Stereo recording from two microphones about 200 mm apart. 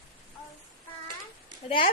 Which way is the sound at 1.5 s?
25° left (ahead or behind).